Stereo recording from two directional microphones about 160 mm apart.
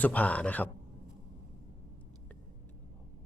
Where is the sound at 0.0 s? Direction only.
10° left (ahead or behind).